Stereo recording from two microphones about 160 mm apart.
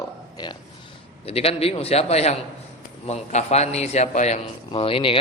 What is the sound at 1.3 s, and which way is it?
A man's voice, 40° left (ahead or behind).